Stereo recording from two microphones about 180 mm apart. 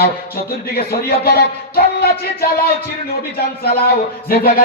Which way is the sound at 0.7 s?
60° left (ahead or behind).